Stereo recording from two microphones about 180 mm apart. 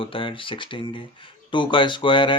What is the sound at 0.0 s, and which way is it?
Speech, 30° left (ahead or behind).